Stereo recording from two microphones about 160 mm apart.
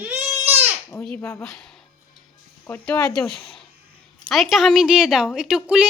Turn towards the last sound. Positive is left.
turn(degrees=-5)  # may be behind; listen again after turning